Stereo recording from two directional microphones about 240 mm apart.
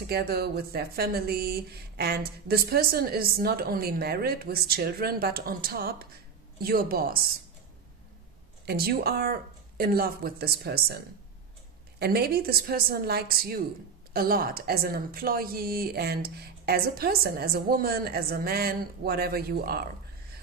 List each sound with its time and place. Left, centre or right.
0.0 s a woman's voice: right
8.6 s a woman's voice: right
12.0 s a woman's voice: right